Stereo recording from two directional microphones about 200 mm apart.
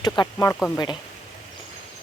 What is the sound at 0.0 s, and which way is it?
Speech, 20° left (ahead or behind).